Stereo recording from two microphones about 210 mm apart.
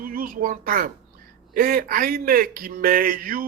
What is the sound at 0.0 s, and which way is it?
Speech, 45° right (ahead or behind).